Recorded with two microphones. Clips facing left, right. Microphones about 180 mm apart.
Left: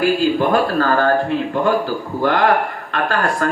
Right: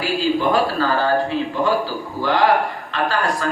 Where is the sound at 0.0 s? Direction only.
55° left (ahead or behind).